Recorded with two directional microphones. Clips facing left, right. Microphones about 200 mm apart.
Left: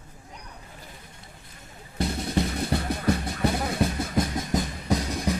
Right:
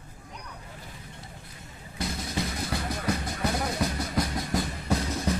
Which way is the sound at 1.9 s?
60° left (ahead or behind).